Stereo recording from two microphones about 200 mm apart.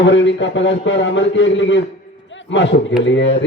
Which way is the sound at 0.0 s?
65° left (ahead or behind).